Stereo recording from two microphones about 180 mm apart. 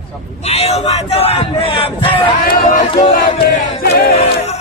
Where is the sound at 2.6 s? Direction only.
35° left (ahead or behind).